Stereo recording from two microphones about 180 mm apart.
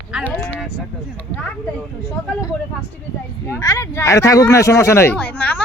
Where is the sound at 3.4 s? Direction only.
15° left (ahead or behind).